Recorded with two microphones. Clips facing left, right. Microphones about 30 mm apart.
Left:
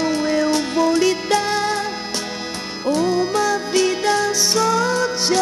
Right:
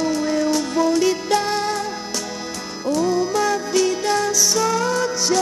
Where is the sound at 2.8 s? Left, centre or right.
Left.